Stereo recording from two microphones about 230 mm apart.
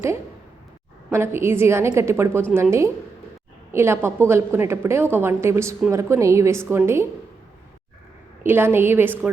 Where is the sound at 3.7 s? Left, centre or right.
Centre.